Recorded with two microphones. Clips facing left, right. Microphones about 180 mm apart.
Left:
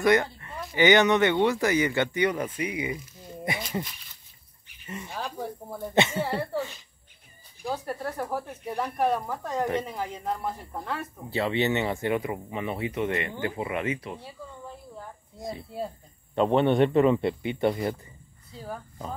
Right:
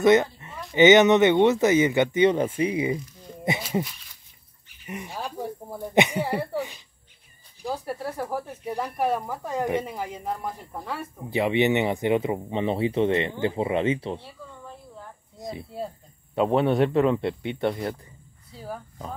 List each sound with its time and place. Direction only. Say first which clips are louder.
0.0 s speech: right 4 dB; 20° right (ahead or behind)
4.8 s speech: right 1 dB; 15° right (ahead or behind)
7.6 s speech: right 1 dB; 5° right (ahead or behind)
11.2 s speech: right 4 dB; 15° right (ahead or behind)
16.3 s speech: even; 5° right (ahead or behind)